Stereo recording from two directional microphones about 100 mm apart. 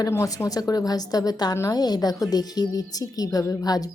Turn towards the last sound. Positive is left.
turn(degrees=40)  # may be behind; listen again after turning